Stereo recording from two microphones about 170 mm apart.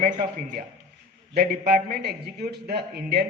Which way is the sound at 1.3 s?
65° right (ahead or behind).